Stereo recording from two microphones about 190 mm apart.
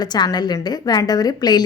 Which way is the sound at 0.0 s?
20° left (ahead or behind).